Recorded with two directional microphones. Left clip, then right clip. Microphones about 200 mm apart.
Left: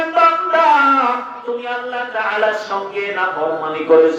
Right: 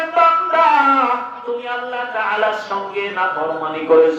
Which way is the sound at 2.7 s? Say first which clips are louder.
Left 1 dB; 20° left (ahead or behind).